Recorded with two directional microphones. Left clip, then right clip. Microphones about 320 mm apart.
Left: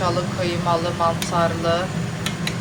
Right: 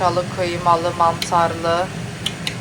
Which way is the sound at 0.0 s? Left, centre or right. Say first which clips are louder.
Right 4 dB; centre.